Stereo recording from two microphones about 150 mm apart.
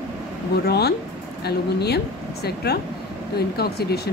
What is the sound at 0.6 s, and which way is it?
Speech, 90° left.